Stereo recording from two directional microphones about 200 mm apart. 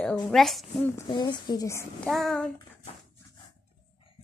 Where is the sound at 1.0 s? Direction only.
20° left (ahead or behind).